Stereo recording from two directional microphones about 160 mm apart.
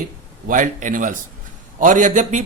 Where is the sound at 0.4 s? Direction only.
55° right (ahead or behind).